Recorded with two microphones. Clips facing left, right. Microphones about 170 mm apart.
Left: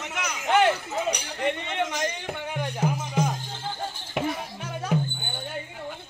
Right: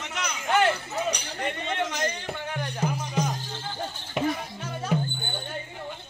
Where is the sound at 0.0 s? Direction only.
5° left (ahead or behind).